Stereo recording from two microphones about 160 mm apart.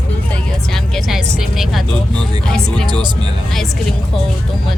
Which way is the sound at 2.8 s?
25° right (ahead or behind).